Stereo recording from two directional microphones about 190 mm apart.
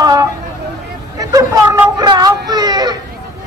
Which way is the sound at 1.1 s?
15° right (ahead or behind).